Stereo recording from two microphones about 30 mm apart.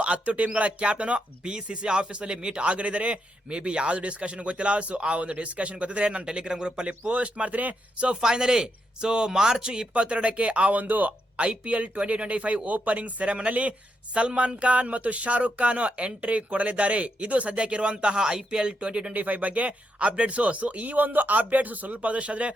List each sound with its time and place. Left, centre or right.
0.3 s a man's voice: right
2.6 s a man's voice: right
6.2 s speech: right
6.8 s speech: right
8.2 s speech: right
9.9 s speech: right
10.8 s speech: right
11.3 s speech: right
18.2 s a man's voice: right
19.1 s speech: right